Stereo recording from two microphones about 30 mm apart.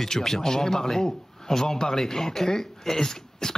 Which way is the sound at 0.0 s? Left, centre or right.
Centre.